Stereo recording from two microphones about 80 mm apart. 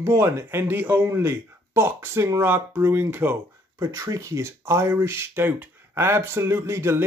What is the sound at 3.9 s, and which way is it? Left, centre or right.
Speech, right.